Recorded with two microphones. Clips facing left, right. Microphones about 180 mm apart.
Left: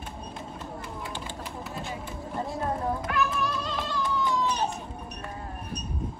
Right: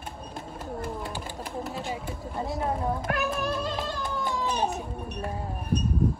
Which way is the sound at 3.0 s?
50° right (ahead or behind).